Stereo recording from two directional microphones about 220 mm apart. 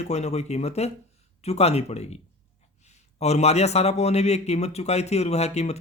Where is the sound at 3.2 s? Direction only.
30° left (ahead or behind).